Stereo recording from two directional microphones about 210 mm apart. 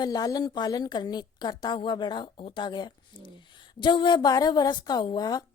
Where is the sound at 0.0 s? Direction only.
20° left (ahead or behind).